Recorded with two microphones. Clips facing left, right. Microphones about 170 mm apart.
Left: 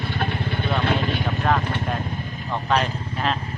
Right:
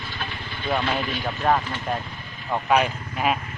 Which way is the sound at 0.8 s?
55° left (ahead or behind).